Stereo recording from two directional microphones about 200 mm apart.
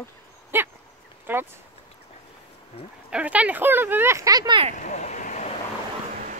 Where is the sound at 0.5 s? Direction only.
10° right (ahead or behind).